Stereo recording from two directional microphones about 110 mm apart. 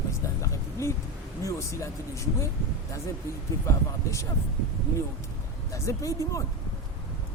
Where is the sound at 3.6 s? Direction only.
25° left (ahead or behind).